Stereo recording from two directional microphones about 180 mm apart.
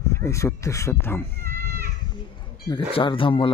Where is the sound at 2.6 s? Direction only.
25° left (ahead or behind).